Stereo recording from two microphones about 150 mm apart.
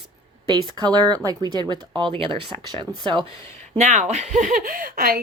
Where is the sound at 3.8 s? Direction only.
50° right (ahead or behind); by 5.1 s 75° right (ahead or behind).